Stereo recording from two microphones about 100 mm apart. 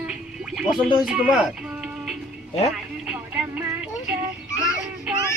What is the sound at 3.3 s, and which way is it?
Music, 15° right (ahead or behind).